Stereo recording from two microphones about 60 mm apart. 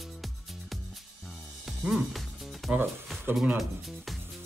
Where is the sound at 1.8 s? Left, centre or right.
Centre.